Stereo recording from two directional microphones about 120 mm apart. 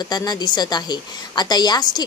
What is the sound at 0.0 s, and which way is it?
A woman's voice, 35° left (ahead or behind).